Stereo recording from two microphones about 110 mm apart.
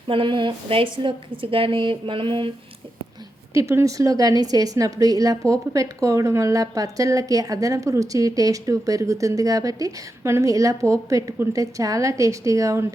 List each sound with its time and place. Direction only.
0.1 s a woman's voice: 50° right (ahead or behind)
3.5 s a woman's voice: 25° right (ahead or behind)